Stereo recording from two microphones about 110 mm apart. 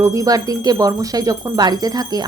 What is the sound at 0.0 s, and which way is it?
Speech, 30° right (ahead or behind).